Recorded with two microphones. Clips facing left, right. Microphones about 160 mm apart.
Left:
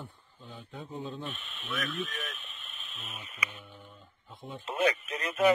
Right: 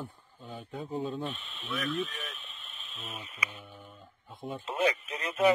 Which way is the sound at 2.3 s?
30° right (ahead or behind).